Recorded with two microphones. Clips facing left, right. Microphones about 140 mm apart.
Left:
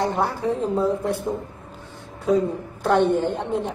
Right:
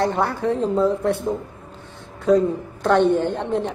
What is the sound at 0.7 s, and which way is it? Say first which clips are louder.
Speech: right 3 dB; 70° right (ahead or behind).